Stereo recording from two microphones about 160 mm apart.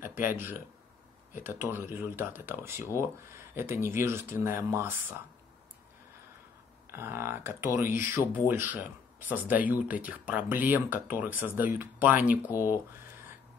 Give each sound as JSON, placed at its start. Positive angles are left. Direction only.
{"t": 0.0, "sound": "speech", "side_deg": -15}
{"t": 6.9, "sound": "speech", "side_deg": -15}